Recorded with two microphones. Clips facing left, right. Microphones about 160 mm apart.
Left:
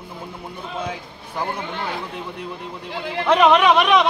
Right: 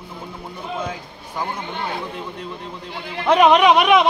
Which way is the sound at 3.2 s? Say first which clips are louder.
Right 2 dB; 10° right (ahead or behind).